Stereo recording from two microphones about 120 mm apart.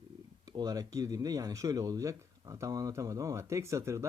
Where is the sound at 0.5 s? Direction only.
30° right (ahead or behind).